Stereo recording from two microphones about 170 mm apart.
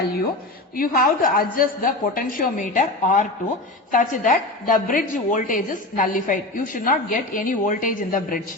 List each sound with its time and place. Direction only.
0.8 s a woman's voice: 60° left (ahead or behind)